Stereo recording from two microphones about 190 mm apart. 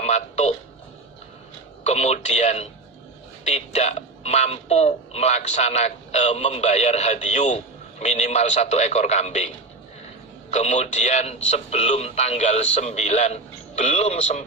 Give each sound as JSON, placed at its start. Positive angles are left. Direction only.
{"t": 0.0, "sound": "a man's voice", "side_deg": 35}
{"t": 1.8, "sound": "a man's voice", "side_deg": 35}
{"t": 10.5, "sound": "a man's voice", "side_deg": 35}